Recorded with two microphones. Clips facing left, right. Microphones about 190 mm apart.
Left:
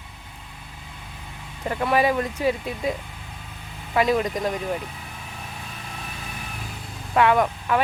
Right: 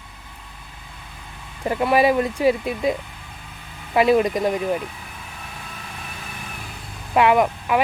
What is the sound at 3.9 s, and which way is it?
Speech, 10° right (ahead or behind).